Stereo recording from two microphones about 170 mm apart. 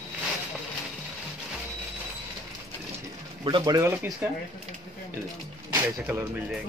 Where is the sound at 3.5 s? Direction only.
25° right (ahead or behind).